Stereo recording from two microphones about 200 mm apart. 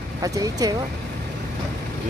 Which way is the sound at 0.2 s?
20° right (ahead or behind).